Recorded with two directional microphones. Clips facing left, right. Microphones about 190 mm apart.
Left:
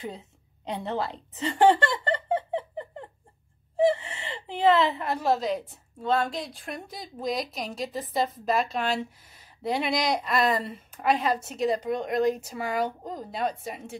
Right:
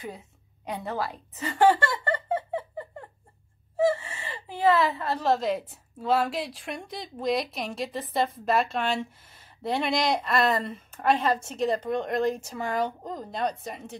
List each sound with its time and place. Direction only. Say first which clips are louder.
0.7 s a sound: left 1 dB; 25° left (ahead or behind)
3.7 s gasp: left 1 dB; 20° left (ahead or behind)
5.3 s a woman's voice: right 1 dB; centre (ahead or behind)